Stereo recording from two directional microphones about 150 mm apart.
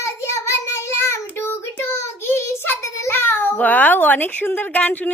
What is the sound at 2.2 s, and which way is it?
A child's voice, 15° left (ahead or behind).